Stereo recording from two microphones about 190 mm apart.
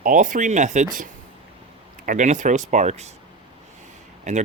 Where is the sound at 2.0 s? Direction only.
40° right (ahead or behind).